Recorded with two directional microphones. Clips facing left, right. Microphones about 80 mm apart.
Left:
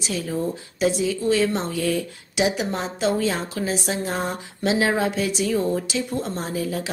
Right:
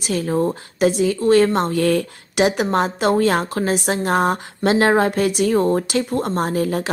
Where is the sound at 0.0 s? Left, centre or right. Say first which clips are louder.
Right 6 dB; right.